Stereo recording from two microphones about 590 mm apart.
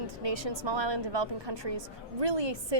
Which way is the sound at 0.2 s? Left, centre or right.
Right.